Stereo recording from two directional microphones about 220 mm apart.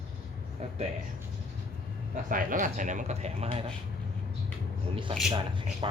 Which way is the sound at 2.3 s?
40° right (ahead or behind).